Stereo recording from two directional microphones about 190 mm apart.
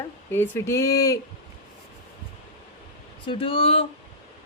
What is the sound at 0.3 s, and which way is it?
Speech, 10° left (ahead or behind).